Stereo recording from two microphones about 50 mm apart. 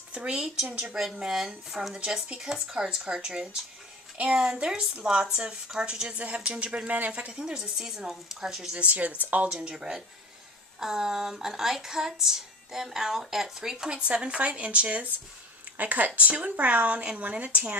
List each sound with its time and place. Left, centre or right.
0.6 s a woman's voice: centre; by 7.3 s right
7.3 s speech: centre
8.8 s a woman's voice: right
9.5 s speech: centre; by 17.6 s right